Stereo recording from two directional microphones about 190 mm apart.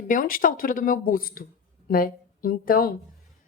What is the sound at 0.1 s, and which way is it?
A woman's voice, 45° left (ahead or behind).